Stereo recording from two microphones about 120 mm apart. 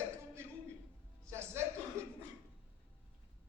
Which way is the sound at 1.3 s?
20° right (ahead or behind).